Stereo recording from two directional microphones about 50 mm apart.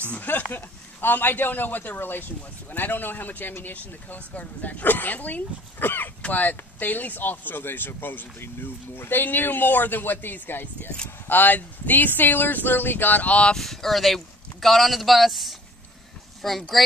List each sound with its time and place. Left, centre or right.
0.1 s speech: left
6.2 s speech: left
13.6 s speech: centre